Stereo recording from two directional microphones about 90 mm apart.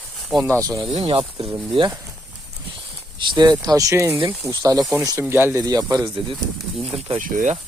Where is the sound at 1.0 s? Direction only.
65° right (ahead or behind).